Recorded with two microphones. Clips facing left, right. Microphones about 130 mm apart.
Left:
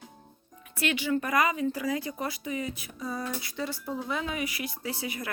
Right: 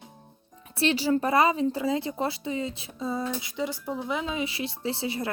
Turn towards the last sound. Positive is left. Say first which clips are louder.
# right 5 dB
turn(degrees=-30)  # may be behind; listen again after turning